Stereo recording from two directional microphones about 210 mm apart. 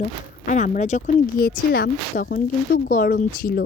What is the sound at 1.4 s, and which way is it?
Speech, 45° left (ahead or behind).